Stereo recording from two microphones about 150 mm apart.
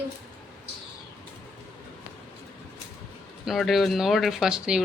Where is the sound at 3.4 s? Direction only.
Centre (ahead or behind).